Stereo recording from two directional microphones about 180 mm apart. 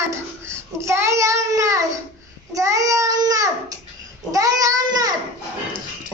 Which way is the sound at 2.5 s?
15° right (ahead or behind).